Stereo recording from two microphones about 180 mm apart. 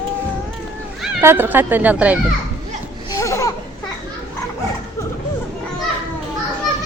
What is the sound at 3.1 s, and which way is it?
Laughter, 15° left (ahead or behind).